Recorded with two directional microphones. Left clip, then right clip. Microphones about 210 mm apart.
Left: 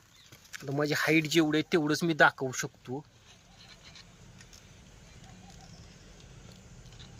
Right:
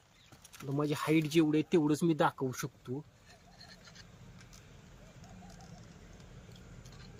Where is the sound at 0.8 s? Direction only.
5° right (ahead or behind).